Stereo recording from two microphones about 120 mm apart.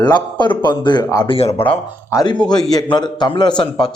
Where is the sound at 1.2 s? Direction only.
55° left (ahead or behind).